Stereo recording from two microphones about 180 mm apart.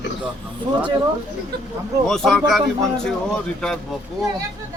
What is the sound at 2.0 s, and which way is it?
Speech, centre (ahead or behind).